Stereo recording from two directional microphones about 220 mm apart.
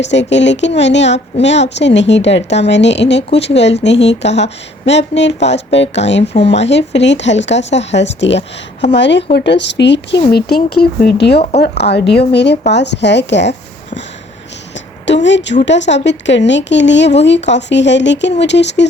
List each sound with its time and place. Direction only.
0.0 s a woman's voice: 55° left (ahead or behind)
15.0 s a woman's voice: 55° left (ahead or behind)